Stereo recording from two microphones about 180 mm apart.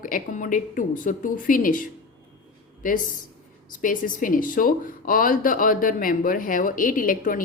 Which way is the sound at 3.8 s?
45° left (ahead or behind).